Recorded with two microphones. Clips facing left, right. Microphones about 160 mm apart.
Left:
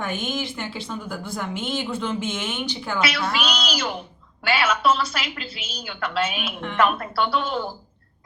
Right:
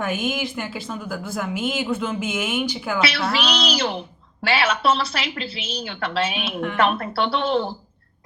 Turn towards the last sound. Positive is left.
turn(degrees=-30)  # may be behind; listen again after turning